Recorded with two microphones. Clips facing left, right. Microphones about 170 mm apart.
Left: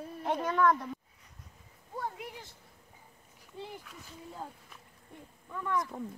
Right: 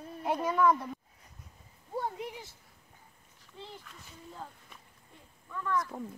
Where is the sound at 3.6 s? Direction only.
10° left (ahead or behind).